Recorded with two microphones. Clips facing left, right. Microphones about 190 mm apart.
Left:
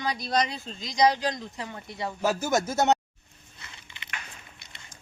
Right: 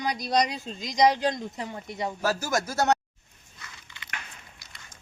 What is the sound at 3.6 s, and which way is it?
Biting, 25° left (ahead or behind).